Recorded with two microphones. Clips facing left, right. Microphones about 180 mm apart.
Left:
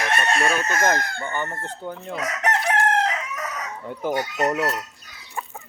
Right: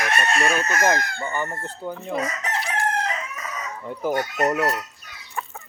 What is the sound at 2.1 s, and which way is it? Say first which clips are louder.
Chicken: left 4 dB; 80° left.